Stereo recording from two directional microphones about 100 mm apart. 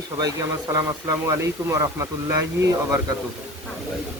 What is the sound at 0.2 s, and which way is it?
Speech, 35° right (ahead or behind).